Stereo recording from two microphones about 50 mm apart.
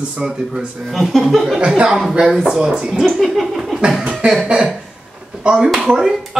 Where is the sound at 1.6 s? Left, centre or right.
Centre.